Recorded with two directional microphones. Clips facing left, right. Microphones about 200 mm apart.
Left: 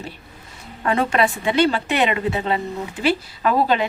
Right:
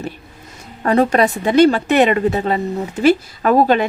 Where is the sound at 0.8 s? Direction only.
40° right (ahead or behind).